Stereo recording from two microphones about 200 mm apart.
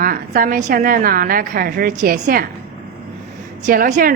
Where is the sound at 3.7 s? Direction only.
45° right (ahead or behind).